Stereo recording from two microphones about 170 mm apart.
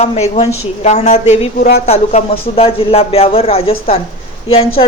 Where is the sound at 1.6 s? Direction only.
70° left (ahead or behind).